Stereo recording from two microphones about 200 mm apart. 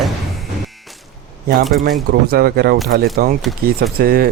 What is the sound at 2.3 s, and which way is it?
Speech, 50° right (ahead or behind).